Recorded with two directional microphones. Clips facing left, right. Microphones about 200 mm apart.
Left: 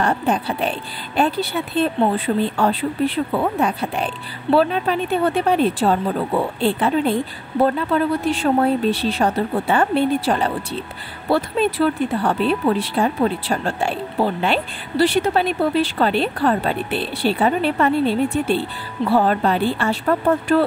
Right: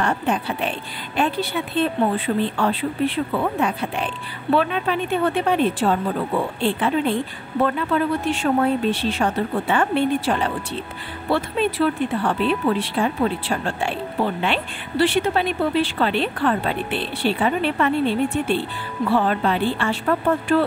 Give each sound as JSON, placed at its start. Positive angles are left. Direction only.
{"t": 0.0, "sound": "speech", "side_deg": 35}